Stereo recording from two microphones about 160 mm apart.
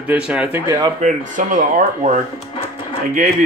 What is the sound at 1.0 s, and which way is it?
Speech, 55° right (ahead or behind).